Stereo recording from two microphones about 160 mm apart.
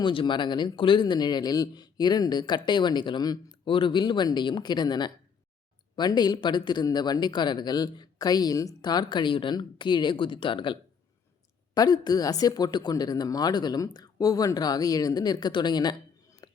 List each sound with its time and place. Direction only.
0.0 s speech: 30° left (ahead or behind)
16.4 s music: 25° left (ahead or behind)